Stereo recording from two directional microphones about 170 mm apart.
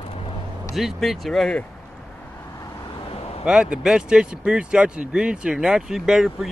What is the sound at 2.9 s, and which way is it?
Vehicle, 35° left (ahead or behind).